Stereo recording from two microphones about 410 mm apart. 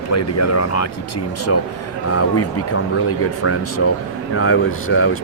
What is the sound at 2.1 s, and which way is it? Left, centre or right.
Speech, left.